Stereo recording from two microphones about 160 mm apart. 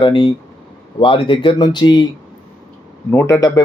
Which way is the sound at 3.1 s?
15° left (ahead or behind).